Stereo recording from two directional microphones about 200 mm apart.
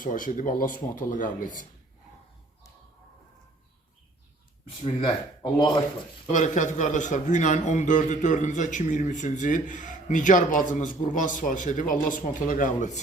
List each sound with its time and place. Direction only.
0.0 s a man's voice: 40° left (ahead or behind)
4.8 s speech: 30° left (ahead or behind)
6.2 s a man's voice: 40° left (ahead or behind)